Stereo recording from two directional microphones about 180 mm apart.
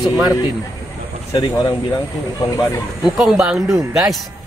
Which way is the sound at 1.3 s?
25° left (ahead or behind).